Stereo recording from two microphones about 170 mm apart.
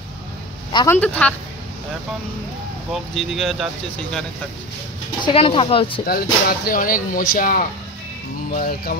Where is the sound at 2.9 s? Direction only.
Centre (ahead or behind).